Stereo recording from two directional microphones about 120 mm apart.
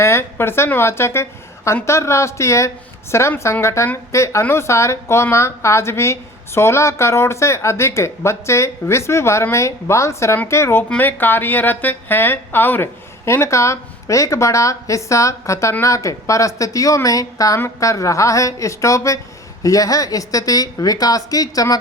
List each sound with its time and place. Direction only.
0.0 s a woman's voice: 20° left (ahead or behind)